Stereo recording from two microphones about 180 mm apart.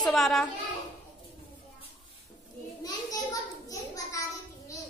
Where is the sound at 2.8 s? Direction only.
20° left (ahead or behind).